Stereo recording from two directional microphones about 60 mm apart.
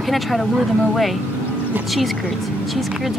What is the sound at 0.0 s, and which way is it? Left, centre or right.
Speech, centre.